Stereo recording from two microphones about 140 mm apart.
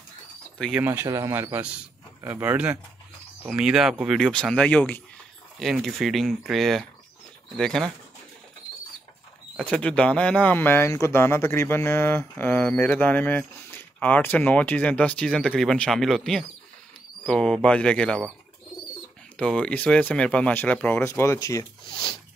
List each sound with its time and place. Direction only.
0.7 s speech: 15° right (ahead or behind); by 7.9 s 5° left (ahead or behind)
9.6 s speech: 5° left (ahead or behind)
19.3 s speech: 5° left (ahead or behind); by 21.6 s 25° left (ahead or behind)
21.8 s speech: 35° left (ahead or behind)